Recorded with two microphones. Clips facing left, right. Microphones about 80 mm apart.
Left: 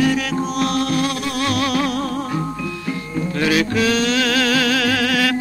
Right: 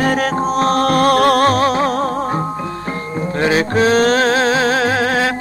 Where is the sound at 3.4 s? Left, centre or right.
Right.